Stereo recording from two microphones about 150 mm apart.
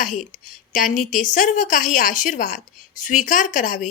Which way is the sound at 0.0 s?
60° left (ahead or behind).